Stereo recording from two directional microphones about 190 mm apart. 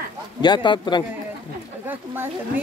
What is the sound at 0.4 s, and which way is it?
Speech, 25° left (ahead or behind).